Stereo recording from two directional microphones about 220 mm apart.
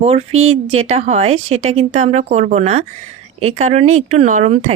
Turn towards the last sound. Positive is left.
turn(degrees=-30)  # may be behind; listen again after turning